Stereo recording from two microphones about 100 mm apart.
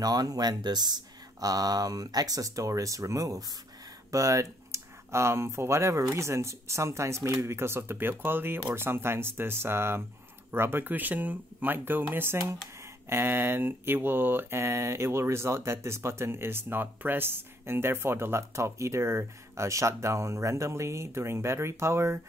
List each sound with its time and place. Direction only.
0.0 s speech: 40° right (ahead or behind)